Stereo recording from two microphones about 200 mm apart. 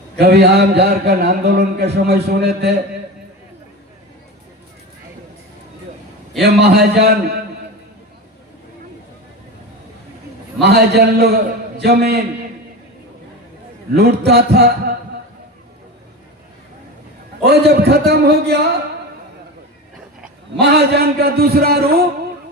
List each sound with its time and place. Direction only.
0.2 s speech: 55° right (ahead or behind)
6.4 s speech: 55° right (ahead or behind)
10.6 s speech: 55° right (ahead or behind)
13.9 s a man's voice: 55° right (ahead or behind)
17.4 s speech: 55° right (ahead or behind)
20.6 s a man's voice: 55° right (ahead or behind)